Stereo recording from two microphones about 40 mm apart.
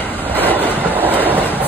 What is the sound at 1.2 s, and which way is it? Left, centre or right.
Train, left.